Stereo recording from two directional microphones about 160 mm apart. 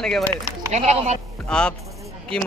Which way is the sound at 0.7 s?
45° right (ahead or behind).